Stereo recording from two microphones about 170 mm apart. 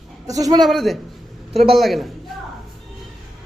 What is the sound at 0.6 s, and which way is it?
Speech, centre (ahead or behind).